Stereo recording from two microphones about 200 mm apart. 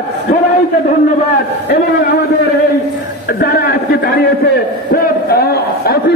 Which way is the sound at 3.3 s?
50° left (ahead or behind).